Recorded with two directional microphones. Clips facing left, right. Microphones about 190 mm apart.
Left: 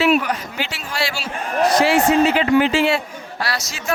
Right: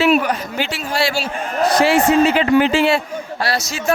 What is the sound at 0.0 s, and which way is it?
Speech, 40° right (ahead or behind).